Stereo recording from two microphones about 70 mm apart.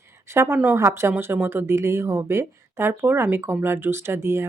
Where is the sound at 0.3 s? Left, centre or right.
Right.